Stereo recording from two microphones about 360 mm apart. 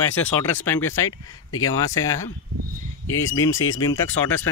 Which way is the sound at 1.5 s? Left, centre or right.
Left.